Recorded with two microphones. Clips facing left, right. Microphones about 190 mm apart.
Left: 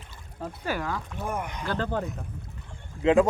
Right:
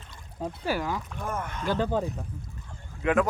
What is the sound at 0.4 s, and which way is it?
Speech, 10° right (ahead or behind).